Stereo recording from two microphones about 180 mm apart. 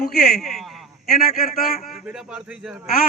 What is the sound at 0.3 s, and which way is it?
Speech, centre (ahead or behind).